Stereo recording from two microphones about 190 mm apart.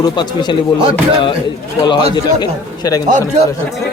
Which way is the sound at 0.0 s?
25° left (ahead or behind).